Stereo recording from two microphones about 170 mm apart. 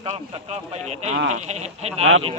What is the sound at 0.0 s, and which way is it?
Speech, 35° right (ahead or behind).